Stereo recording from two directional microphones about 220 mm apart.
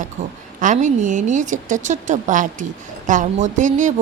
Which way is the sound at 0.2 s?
35° right (ahead or behind).